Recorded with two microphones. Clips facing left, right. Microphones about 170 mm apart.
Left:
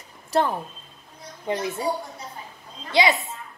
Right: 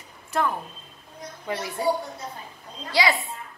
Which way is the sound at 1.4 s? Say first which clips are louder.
Left 4 dB; 20° left (ahead or behind).